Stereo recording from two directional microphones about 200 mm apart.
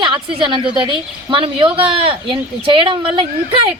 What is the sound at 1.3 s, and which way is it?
A woman's voice, 25° right (ahead or behind).